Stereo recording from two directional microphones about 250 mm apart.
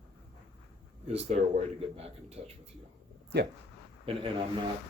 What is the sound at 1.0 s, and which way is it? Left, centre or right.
Speech, right.